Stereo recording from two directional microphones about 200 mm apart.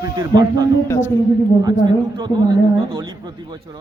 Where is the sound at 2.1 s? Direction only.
20° right (ahead or behind).